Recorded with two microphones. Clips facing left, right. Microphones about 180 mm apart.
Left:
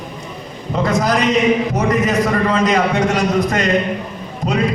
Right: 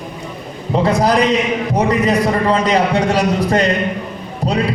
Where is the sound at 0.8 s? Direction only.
35° right (ahead or behind).